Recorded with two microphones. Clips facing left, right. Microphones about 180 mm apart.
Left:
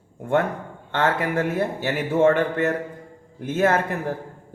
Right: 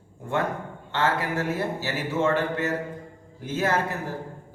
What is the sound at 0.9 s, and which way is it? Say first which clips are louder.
A man's voice: left 3 dB; 55° left (ahead or behind).